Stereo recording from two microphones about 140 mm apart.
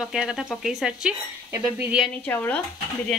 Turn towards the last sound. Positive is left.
turn(degrees=10)  # may be behind; listen again after turning